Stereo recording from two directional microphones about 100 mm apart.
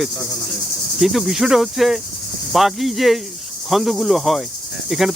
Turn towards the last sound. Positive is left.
turn(degrees=-5)  # may be behind; listen again after turning